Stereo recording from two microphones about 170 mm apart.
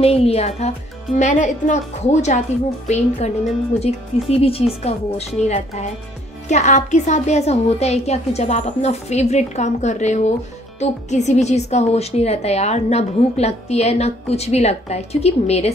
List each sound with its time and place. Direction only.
0.0 s a woman's voice: 35° left (ahead or behind)
3.8 s a woman's voice: 35° left (ahead or behind)